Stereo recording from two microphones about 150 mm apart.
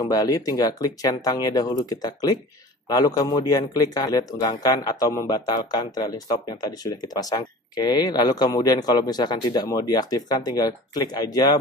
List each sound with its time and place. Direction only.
0.0 s a man's voice: 25° left (ahead or behind)